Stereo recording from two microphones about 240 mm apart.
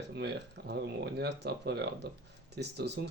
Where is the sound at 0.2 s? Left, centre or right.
Right.